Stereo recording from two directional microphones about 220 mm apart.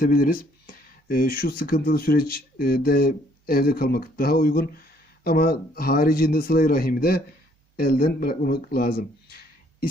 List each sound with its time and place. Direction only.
0.0 s speech: 40° left (ahead or behind)